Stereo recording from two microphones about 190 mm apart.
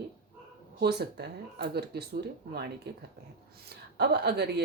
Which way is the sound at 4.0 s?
60° right (ahead or behind).